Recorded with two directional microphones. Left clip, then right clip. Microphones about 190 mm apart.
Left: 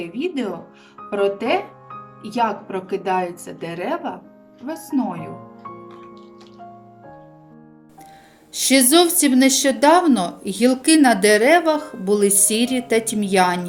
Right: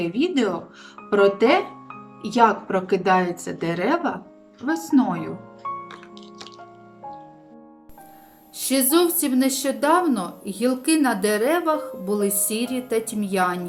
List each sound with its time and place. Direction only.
0.0 s a woman's voice: 10° left (ahead or behind)
5.9 s music: 45° right (ahead or behind)
8.5 s a woman's voice: 20° left (ahead or behind)